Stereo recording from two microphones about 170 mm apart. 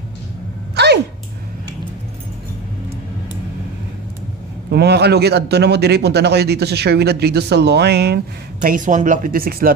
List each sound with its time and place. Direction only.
0.7 s a sound: 75° right (ahead or behind)
4.6 s a man's voice: 80° right
8.6 s speech: 50° right (ahead or behind)